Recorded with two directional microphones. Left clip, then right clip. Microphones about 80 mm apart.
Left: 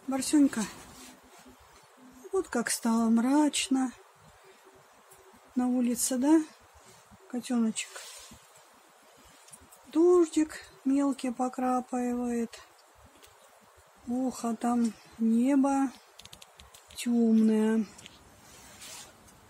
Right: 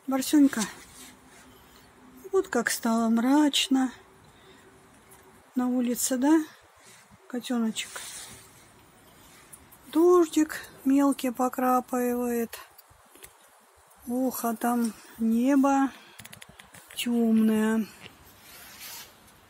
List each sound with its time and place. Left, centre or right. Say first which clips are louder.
0.1 s speech: right 3 dB; right
2.3 s speech: right 5 dB; right
5.6 s speech: right 2 dB; right
9.8 s speech: right 2 dB; right
14.2 s speech: right 4 dB; right
17.0 s a sound: right 1 dB; centre